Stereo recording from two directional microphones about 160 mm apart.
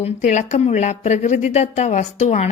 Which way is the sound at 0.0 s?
45° left (ahead or behind).